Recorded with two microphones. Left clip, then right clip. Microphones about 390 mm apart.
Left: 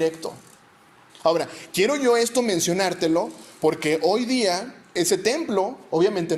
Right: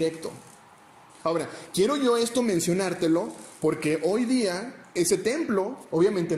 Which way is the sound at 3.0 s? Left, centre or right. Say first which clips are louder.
Left 3 dB; left.